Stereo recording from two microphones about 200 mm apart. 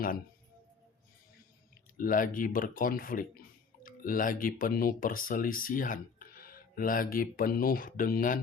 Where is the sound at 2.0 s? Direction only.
45° left (ahead or behind).